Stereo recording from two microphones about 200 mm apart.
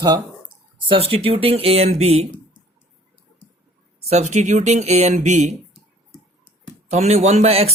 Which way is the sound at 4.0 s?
35° right (ahead or behind).